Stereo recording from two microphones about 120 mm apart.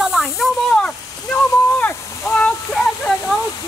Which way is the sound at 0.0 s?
5° right (ahead or behind).